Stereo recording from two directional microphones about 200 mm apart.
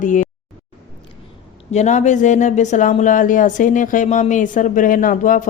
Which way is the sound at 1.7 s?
35° left (ahead or behind).